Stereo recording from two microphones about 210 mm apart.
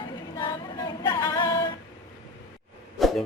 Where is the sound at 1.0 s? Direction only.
15° left (ahead or behind).